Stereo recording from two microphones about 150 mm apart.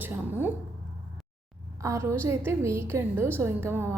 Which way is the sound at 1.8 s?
20° right (ahead or behind).